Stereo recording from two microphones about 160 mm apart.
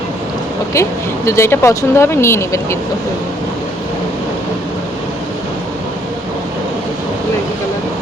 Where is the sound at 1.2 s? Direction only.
15° left (ahead or behind).